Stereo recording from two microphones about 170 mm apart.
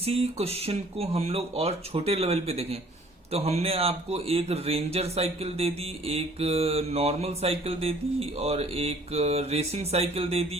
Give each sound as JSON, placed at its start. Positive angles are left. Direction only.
{"t": 0.0, "sound": "a man's voice", "side_deg": -35}